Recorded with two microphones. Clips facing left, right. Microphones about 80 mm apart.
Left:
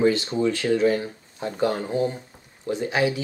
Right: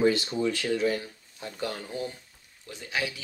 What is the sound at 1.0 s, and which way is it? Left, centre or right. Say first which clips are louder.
Speech: left 10 dB; left.